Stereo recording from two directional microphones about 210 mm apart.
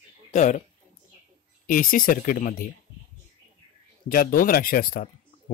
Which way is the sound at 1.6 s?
40° left (ahead or behind).